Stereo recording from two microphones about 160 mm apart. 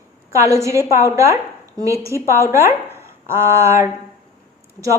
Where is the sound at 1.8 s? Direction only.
20° right (ahead or behind).